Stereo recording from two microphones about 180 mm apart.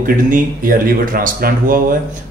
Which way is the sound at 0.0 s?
50° right (ahead or behind).